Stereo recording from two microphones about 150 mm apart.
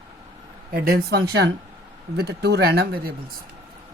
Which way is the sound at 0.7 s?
90° right.